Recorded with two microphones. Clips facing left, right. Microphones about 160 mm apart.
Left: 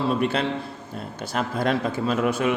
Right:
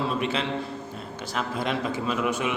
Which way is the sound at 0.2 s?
50° left (ahead or behind).